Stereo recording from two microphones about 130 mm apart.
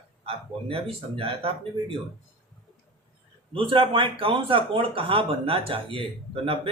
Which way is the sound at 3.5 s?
45° right (ahead or behind).